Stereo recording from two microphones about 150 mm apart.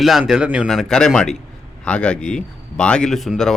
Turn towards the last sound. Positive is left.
turn(degrees=0)  # may be behind; listen again after turning